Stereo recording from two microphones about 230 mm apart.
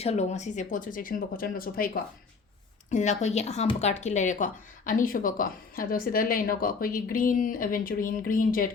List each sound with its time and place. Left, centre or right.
0.0 s speech: left
2.9 s speech: left